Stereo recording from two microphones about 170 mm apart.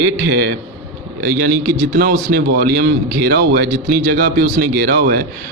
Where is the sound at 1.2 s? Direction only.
80° right.